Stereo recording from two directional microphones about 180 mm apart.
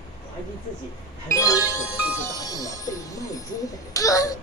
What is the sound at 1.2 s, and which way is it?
Speech, 20° left (ahead or behind).